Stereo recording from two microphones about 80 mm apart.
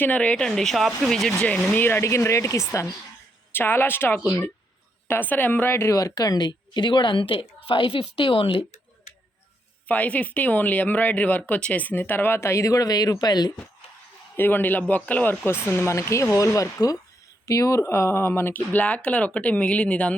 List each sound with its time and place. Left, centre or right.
0.0 s speech: centre
1.7 s speech: left
3.5 s a woman's voice: left
9.9 s speech: centre; by 13.5 s left
14.3 s speech: left